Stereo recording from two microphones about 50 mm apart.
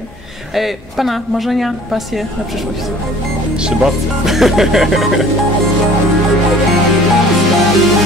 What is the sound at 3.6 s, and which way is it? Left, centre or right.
Speech, centre.